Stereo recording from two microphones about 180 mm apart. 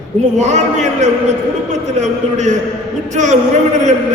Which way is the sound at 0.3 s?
40° right (ahead or behind).